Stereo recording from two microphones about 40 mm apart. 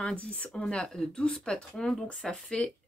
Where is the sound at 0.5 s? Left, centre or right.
Left.